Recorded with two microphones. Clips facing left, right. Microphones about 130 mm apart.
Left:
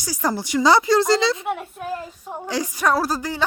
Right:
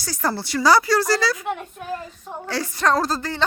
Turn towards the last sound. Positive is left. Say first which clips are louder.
# even
turn(degrees=10)  # may be behind; listen again after turning